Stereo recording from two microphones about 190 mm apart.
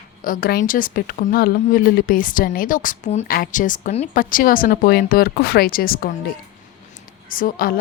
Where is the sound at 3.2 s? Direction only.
50° left (ahead or behind).